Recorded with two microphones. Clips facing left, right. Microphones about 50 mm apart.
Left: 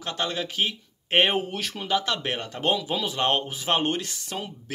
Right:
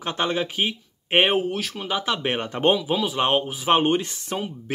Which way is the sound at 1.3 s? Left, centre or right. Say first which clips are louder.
Right 4 dB; centre.